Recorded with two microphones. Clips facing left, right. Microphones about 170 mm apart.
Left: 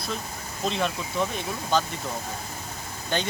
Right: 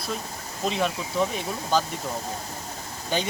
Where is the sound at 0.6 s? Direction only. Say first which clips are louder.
Right 1 dB; 5° right (ahead or behind).